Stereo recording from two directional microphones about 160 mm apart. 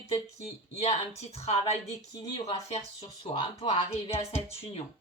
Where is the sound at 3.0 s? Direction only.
35° left (ahead or behind).